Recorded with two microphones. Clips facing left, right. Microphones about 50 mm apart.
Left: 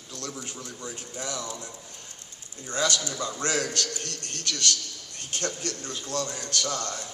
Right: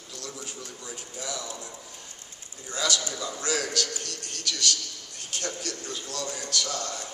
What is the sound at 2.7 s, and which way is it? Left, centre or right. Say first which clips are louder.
A man's voice: left 2 dB; left.